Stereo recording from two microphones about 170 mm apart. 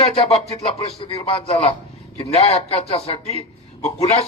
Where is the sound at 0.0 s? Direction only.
40° left (ahead or behind).